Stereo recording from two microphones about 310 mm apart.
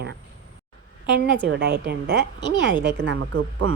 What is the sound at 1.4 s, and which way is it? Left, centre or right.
Speech, right.